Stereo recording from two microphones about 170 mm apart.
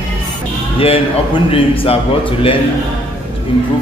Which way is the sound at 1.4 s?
35° left (ahead or behind).